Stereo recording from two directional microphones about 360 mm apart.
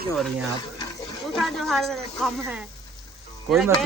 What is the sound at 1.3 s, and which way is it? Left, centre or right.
Speech, centre.